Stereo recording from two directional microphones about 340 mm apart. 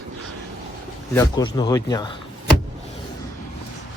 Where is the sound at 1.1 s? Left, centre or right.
Centre.